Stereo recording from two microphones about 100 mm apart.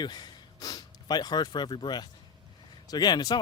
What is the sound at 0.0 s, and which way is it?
Speech, 45° left (ahead or behind).